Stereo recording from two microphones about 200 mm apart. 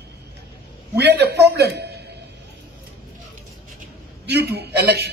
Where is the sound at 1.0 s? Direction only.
55° right (ahead or behind).